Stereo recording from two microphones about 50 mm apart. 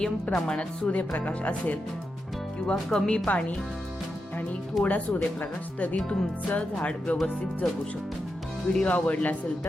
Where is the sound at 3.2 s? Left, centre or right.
Left.